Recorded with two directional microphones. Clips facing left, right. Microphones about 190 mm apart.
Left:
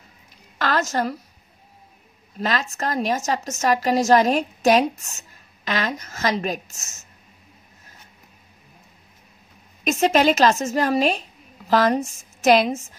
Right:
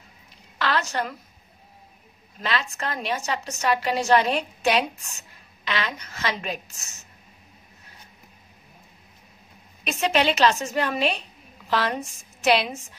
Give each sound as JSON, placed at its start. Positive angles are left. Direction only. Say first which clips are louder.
{"t": 0.6, "sound": "a woman's voice", "louder": "left 3 dB", "side_deg": 45}
{"t": 2.4, "sound": "a woman's voice", "louder": "left 4 dB", "side_deg": 45}
{"t": 9.8, "sound": "a woman's voice", "louder": "left 5 dB", "side_deg": 45}